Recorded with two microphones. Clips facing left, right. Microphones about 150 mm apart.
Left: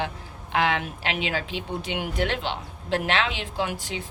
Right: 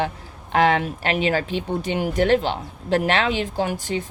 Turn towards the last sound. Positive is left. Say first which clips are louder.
# right 5 dB
turn(degrees=-45)  # may be behind; listen again after turning